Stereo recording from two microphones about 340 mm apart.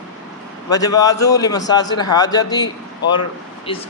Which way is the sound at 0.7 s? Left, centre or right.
Centre.